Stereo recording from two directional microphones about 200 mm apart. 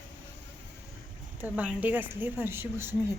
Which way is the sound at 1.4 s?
10° right (ahead or behind).